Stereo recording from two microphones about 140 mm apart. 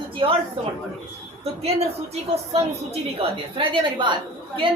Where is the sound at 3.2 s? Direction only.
40° right (ahead or behind).